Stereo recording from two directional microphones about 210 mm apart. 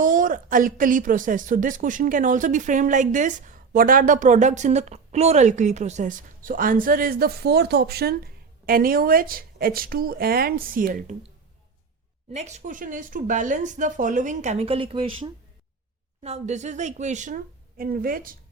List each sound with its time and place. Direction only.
0.0 s a woman's voice: 40° right (ahead or behind)
12.3 s a woman's voice: 35° right (ahead or behind)